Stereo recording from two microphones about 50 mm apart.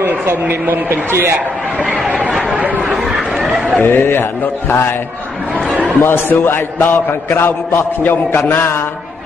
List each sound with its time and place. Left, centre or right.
0.0 s speech: right
2.8 s chatter: centre
3.8 s a man's voice: left
6.0 s a man's voice: left
8.0 s a man's voice: left
8.4 s a man's voice: left